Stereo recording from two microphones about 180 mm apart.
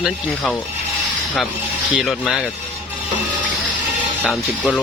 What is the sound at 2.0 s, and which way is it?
Speech, centre (ahead or behind).